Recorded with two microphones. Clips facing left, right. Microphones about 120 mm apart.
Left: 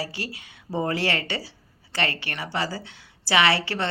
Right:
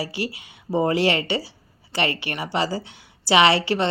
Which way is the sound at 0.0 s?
10° right (ahead or behind).